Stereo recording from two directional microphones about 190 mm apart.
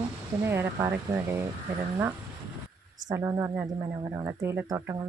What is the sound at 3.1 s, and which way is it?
A woman's voice, 15° right (ahead or behind).